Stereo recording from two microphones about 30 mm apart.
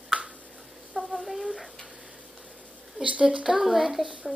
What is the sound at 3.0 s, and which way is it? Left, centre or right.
Speech, right.